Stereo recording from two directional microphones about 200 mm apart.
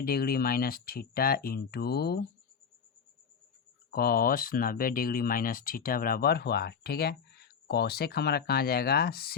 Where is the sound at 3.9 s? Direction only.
50° left (ahead or behind).